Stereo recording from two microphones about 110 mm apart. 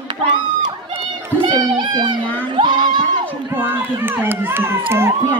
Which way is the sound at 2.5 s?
45° right (ahead or behind).